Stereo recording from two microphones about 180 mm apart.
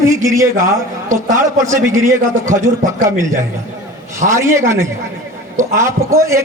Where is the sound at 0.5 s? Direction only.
45° right (ahead or behind).